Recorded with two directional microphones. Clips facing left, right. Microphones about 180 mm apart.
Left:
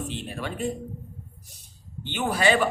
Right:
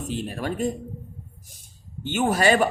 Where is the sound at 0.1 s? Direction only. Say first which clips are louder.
Right 5 dB; 45° right (ahead or behind).